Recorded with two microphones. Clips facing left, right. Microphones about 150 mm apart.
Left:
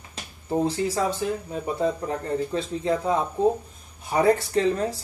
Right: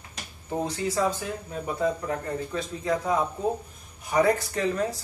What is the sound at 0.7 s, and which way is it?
Speech, 30° left (ahead or behind).